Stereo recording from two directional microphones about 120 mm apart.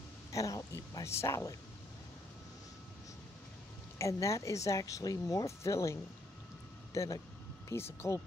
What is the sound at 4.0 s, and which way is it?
Speech, 25° left (ahead or behind).